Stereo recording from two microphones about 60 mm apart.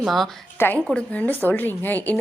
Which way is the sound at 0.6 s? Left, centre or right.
Left.